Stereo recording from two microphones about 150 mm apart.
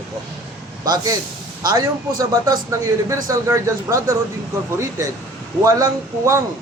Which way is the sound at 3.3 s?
20° right (ahead or behind).